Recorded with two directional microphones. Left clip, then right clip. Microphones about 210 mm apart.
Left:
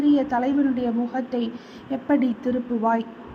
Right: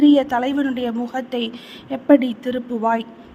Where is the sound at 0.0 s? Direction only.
45° right (ahead or behind).